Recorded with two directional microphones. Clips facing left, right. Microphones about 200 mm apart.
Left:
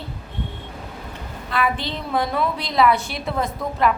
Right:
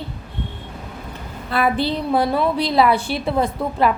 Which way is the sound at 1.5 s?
35° right (ahead or behind).